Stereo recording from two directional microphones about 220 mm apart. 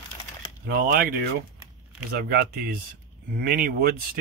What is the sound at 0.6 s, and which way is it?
Speech, 40° right (ahead or behind).